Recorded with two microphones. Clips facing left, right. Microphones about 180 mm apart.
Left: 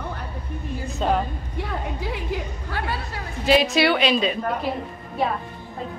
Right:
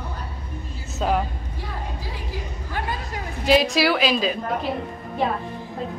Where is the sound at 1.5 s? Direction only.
60° left (ahead or behind).